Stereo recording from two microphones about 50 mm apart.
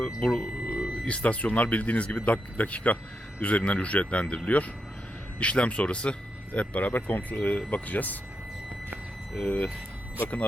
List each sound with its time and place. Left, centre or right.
0.2 s speech: left
9.4 s speech: left